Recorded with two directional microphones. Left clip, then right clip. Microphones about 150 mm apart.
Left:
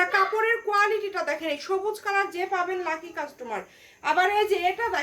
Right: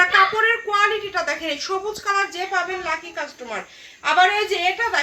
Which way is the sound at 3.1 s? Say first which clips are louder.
Right 3 dB; 35° left (ahead or behind).